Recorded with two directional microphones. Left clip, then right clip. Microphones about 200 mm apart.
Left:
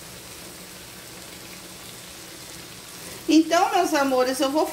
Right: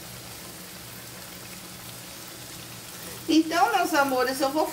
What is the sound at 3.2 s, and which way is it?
Speech, 35° left (ahead or behind).